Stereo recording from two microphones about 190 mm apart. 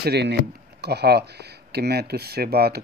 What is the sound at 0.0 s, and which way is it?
Speech, 60° right (ahead or behind).